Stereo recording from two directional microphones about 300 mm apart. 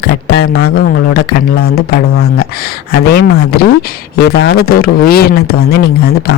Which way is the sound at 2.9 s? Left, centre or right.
Left.